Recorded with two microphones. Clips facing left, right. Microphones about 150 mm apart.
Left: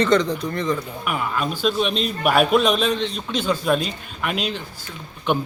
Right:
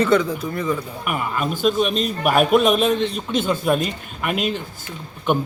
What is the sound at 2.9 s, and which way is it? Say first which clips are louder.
Speech: right 3 dB; 50° right (ahead or behind).